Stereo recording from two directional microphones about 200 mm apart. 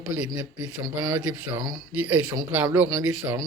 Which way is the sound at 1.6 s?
20° right (ahead or behind).